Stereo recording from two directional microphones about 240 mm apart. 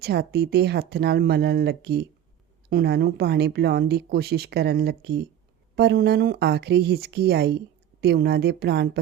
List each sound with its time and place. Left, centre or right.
0.0 s speech: right